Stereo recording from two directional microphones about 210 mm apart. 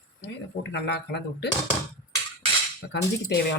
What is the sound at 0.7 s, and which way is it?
Speech, 55° left (ahead or behind).